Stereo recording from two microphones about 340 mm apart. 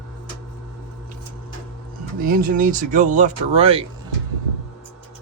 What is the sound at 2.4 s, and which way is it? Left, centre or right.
Speech, right.